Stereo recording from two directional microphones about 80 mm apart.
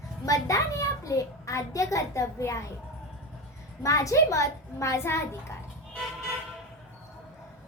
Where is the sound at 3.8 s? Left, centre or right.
Left.